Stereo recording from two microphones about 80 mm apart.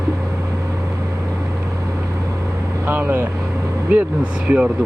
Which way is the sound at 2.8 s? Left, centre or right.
Right.